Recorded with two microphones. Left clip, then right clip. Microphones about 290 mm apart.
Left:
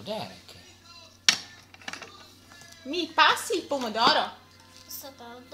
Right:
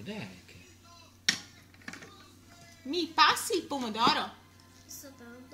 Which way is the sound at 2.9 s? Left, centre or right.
Centre.